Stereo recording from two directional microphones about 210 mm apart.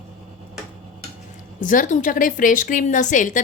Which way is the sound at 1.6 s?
40° left (ahead or behind).